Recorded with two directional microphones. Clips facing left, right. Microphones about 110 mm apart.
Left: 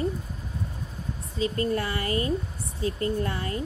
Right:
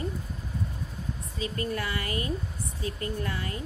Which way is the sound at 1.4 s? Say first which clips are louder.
Left 5 dB; 30° left (ahead or behind).